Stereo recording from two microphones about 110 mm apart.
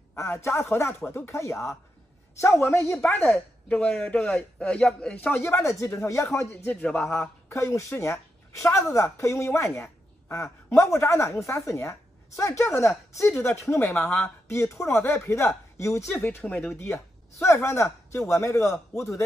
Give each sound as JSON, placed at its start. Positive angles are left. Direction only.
{"t": 0.1, "sound": "a man's voice", "side_deg": 25}
{"t": 6.5, "sound": "a man's voice", "side_deg": 15}
{"t": 7.1, "sound": "speech", "side_deg": 25}
{"t": 9.8, "sound": "a sound", "side_deg": 25}
{"t": 10.8, "sound": "a man's voice", "side_deg": 25}
{"t": 14.5, "sound": "speech", "side_deg": 25}
{"t": 16.2, "sound": "a man's voice", "side_deg": 15}